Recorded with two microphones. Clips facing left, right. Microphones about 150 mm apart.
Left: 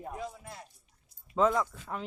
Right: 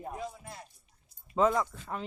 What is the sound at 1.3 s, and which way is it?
Speech, centre (ahead or behind).